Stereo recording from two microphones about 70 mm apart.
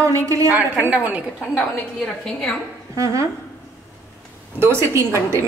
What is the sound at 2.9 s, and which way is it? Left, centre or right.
Speech, right.